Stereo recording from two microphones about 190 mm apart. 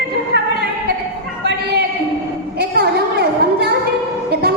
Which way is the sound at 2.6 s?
55° right (ahead or behind).